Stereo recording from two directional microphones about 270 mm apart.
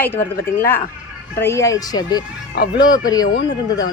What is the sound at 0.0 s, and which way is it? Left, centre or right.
Speech, centre.